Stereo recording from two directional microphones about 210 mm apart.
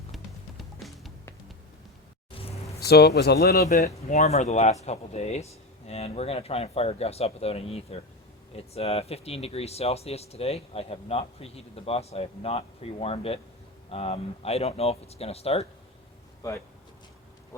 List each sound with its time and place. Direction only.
0.1 s music: centre (ahead or behind)
2.8 s a man's voice: 50° left (ahead or behind)
3.7 s speech: 35° left (ahead or behind)
16.4 s speech: 15° left (ahead or behind)